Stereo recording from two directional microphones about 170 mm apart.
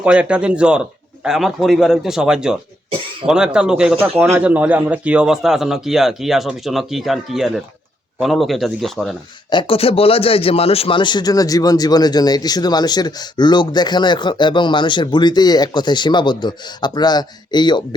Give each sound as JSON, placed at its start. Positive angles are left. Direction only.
{"t": 0.0, "sound": "a man's voice", "side_deg": -5}
{"t": 9.5, "sound": "a man's voice", "side_deg": 30}